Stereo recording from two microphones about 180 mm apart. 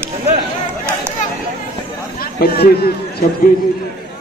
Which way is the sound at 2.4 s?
60° left (ahead or behind).